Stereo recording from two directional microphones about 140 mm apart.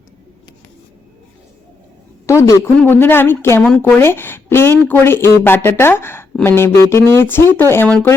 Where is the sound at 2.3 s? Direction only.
20° left (ahead or behind).